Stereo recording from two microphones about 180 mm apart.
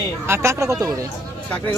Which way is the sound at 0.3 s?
15° right (ahead or behind).